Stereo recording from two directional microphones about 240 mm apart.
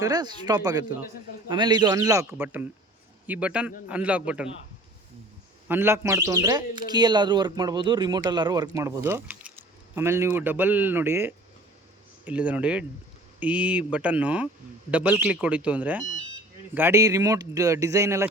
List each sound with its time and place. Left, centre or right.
0.0 s a man's voice: centre
5.6 s a man's voice: centre